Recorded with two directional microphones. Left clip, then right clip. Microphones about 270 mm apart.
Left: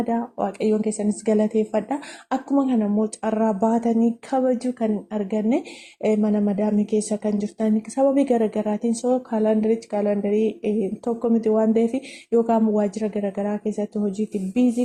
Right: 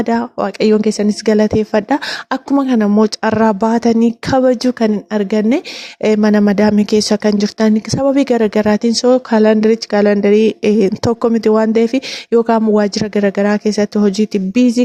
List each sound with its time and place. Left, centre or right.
0.0 s speech: right